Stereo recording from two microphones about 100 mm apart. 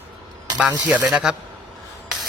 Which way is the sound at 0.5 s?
15° right (ahead or behind).